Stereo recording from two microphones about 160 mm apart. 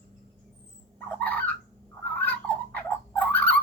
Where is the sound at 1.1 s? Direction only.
10° left (ahead or behind).